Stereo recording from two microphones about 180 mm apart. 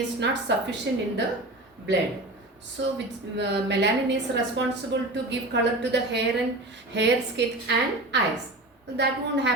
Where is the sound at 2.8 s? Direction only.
75° right (ahead or behind).